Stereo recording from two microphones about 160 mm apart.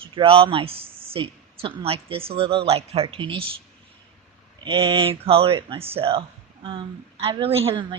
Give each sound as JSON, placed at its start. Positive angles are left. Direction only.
{"t": 0.0, "sound": "speech", "side_deg": -35}
{"t": 4.6, "sound": "speech", "side_deg": -35}